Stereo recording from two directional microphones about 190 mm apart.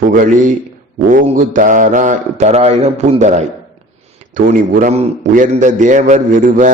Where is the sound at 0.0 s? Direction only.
45° right (ahead or behind).